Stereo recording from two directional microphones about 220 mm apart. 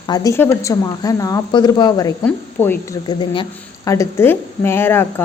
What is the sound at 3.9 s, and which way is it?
Speech, 15° left (ahead or behind).